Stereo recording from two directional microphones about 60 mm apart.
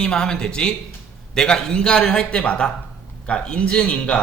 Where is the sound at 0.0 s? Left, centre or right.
Centre.